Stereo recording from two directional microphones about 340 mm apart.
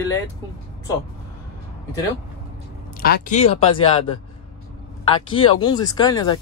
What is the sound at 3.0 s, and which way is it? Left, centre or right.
Speech, left.